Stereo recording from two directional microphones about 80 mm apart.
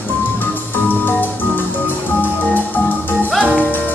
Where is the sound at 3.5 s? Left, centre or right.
Left.